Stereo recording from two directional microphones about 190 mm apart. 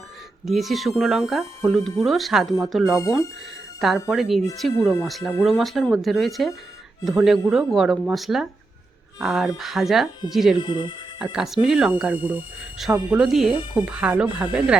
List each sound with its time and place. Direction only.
0.4 s speech: centre (ahead or behind)
10.6 s speech: 25° left (ahead or behind)
11.2 s speech: 5° right (ahead or behind)